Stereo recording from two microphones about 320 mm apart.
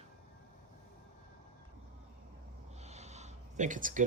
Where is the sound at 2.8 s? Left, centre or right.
Centre.